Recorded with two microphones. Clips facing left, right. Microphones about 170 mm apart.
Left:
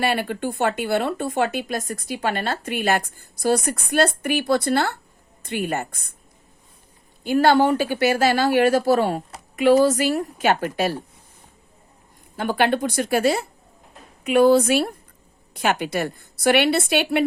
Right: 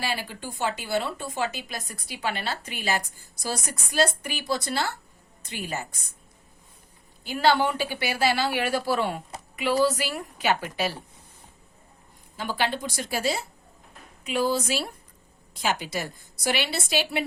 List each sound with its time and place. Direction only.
0.0 s speech: 60° left (ahead or behind)
7.3 s speech: 45° left (ahead or behind)
12.4 s speech: 55° left (ahead or behind)